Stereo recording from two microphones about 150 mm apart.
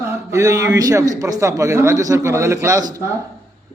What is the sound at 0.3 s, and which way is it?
A man's voice, 20° right (ahead or behind).